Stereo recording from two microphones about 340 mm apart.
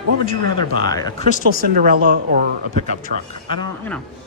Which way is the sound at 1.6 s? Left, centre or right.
Right.